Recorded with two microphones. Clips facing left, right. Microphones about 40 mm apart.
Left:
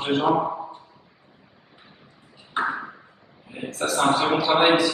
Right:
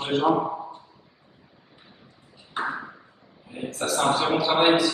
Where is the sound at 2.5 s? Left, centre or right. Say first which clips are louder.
Left 4 dB; centre.